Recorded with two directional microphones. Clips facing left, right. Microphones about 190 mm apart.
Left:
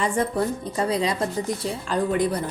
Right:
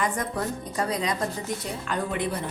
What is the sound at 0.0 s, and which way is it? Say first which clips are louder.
Speech: left 5 dB; 30° left (ahead or behind).